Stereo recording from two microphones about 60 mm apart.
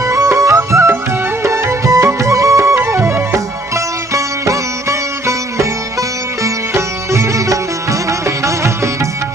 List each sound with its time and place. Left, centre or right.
0.0 s music: right